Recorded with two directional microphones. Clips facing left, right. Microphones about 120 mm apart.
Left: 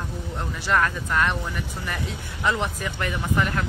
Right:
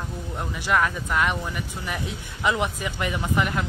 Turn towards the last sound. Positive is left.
turn(degrees=-15)  # may be behind; listen again after turning